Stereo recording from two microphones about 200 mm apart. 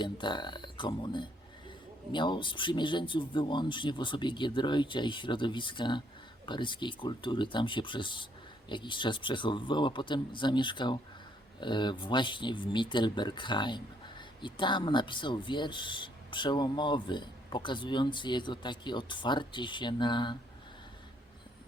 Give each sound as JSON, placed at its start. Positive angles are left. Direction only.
{"t": 0.0, "sound": "speech", "side_deg": 25}